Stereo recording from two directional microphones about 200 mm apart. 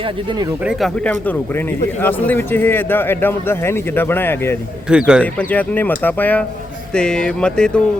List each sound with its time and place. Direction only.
0.6 s speech: 5° right (ahead or behind)
1.0 s a man's voice: 10° left (ahead or behind)
4.9 s speech: 5° right (ahead or behind)
5.2 s a man's voice: 5° left (ahead or behind)